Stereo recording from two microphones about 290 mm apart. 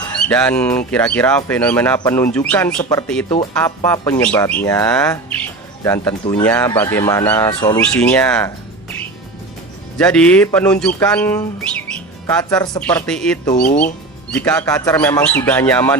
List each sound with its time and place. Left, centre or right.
0.3 s speech: centre
10.0 s speech: centre
13.7 s speech: left
14.3 s speech: centre